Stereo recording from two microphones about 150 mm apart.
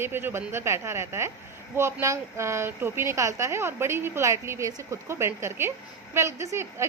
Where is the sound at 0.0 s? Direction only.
15° right (ahead or behind).